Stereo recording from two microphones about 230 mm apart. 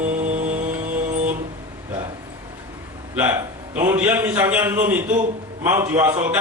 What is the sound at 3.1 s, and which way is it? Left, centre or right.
A man's voice, centre.